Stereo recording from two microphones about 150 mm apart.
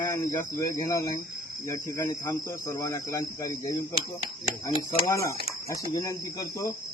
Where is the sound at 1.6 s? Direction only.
20° left (ahead or behind).